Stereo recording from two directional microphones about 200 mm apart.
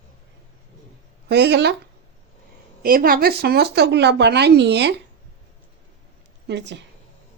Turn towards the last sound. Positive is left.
turn(degrees=-60)  # may be behind; listen again after turning